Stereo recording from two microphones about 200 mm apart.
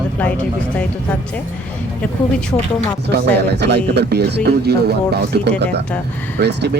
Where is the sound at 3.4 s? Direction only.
60° right (ahead or behind).